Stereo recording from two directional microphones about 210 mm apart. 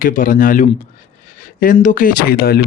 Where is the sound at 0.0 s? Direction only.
40° left (ahead or behind).